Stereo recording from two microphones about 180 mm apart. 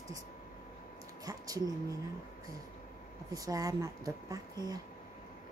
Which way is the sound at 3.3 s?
20° right (ahead or behind).